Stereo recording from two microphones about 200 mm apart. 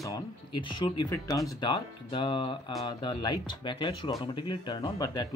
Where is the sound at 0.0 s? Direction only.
20° left (ahead or behind).